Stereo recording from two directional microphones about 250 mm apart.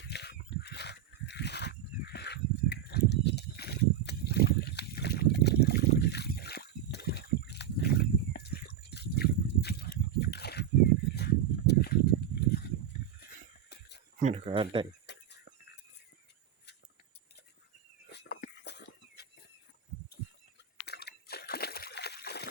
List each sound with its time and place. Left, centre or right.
0.0 s a sound: left
11.1 s horse: left
14.2 s speech: right
15.0 s a sound: left
18.1 s dog: left
18.4 s chicken: left
20.8 s slosh: left